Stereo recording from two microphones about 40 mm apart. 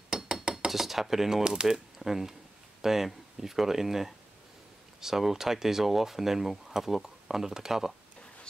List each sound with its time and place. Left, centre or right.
0.1 s a sound: right
0.7 s speech: centre
1.4 s speech: centre
2.0 s speech: centre